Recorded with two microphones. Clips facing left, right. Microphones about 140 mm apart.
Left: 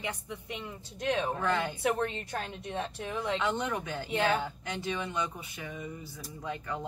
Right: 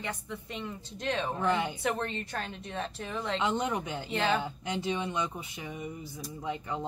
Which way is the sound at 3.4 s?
15° right (ahead or behind).